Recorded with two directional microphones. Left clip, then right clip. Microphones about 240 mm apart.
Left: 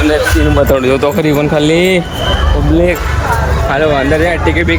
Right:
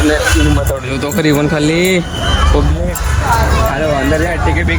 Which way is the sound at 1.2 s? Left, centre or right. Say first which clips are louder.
Left 2 dB; centre.